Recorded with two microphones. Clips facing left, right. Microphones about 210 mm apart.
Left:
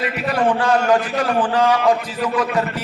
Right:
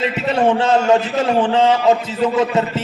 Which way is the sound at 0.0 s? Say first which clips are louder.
Right 3 dB; 25° right (ahead or behind).